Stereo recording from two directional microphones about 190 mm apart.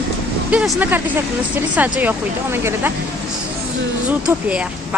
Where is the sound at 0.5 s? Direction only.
5° right (ahead or behind).